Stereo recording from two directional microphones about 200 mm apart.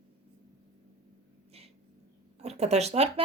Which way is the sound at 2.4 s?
35° right (ahead or behind).